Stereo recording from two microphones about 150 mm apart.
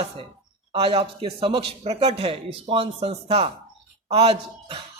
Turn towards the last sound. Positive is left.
turn(degrees=-40)  # may be behind; listen again after turning